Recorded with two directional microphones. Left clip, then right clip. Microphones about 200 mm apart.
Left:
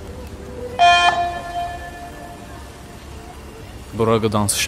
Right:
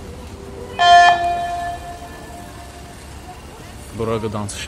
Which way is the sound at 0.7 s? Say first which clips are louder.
Right 3 dB; 5° right (ahead or behind).